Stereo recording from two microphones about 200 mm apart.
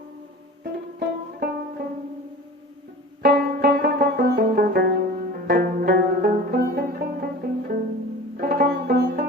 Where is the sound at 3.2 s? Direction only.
50° right (ahead or behind).